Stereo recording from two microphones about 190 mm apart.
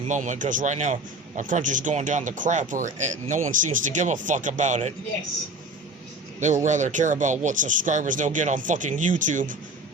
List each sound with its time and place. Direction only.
0.1 s speech: 40° right (ahead or behind)
6.4 s speech: 40° right (ahead or behind)